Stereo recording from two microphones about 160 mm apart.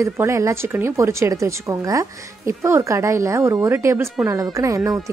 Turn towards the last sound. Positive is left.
turn(degrees=-20)  # may be behind; listen again after turning